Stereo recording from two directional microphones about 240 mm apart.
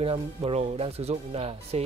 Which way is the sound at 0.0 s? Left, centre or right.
Right.